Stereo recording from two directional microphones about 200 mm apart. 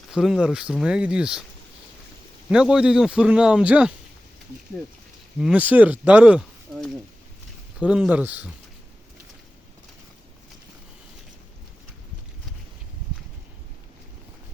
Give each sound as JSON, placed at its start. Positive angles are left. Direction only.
{"t": 0.1, "sound": "a man's voice", "side_deg": 0}
{"t": 2.5, "sound": "a man's voice", "side_deg": -5}
{"t": 5.4, "sound": "speech", "side_deg": -5}